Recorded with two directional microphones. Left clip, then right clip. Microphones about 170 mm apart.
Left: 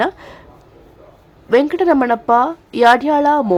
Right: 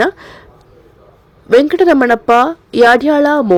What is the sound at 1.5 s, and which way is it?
A woman's voice, 25° right (ahead or behind).